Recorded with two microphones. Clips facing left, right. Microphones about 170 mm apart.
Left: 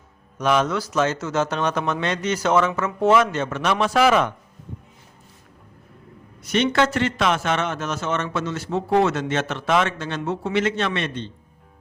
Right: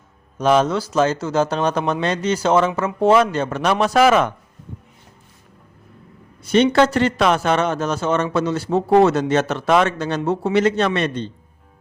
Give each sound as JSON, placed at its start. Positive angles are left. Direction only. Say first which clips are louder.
{"t": 0.3, "sound": "a man's voice", "louder": "right 4 dB", "side_deg": -30}
{"t": 6.4, "sound": "a man's voice", "louder": "right 5 dB", "side_deg": -30}